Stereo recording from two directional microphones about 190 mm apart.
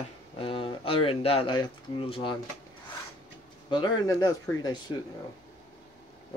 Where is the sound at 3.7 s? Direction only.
25° left (ahead or behind).